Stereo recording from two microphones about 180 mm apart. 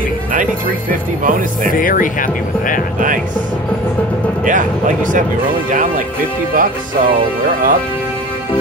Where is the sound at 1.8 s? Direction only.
50° left (ahead or behind).